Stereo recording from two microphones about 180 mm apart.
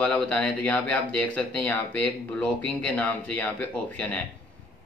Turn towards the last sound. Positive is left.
turn(degrees=10)  # may be behind; listen again after turning